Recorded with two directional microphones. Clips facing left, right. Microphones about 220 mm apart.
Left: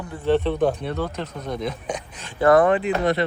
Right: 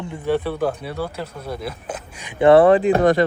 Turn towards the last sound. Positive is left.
turn(degrees=-50)  # may be behind; listen again after turning